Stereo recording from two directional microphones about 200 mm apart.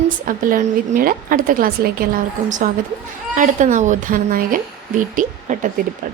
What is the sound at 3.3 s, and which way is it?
A woman's voice, 40° right (ahead or behind).